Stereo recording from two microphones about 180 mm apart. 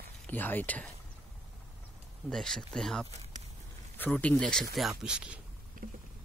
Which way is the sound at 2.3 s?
5° left (ahead or behind).